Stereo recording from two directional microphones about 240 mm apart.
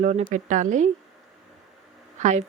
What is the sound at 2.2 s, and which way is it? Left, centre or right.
Speech, right.